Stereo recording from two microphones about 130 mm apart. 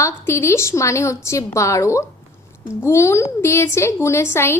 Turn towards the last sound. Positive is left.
turn(degrees=20)  # may be behind; listen again after turning